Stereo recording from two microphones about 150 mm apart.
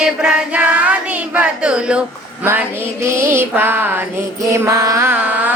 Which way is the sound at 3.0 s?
15° right (ahead or behind).